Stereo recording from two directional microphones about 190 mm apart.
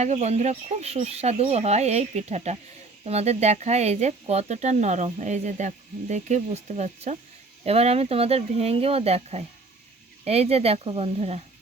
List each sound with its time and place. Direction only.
0.0 s speech: 35° right (ahead or behind)